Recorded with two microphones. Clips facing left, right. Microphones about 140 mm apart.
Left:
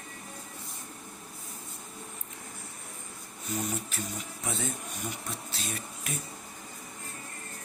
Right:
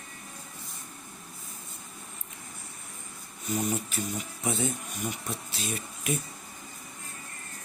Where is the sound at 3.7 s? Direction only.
15° right (ahead or behind).